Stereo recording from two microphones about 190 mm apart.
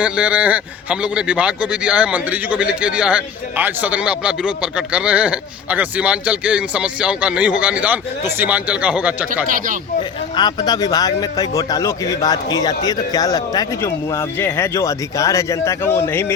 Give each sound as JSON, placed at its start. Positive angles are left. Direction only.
{"t": 0.0, "sound": "a man's voice", "side_deg": -5}
{"t": 9.5, "sound": "speech", "side_deg": -45}
{"t": 10.3, "sound": "speech", "side_deg": 25}